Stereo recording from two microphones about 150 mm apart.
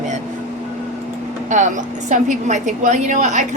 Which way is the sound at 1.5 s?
55° right (ahead or behind).